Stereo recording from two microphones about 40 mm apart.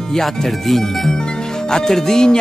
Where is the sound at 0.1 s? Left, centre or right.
Centre.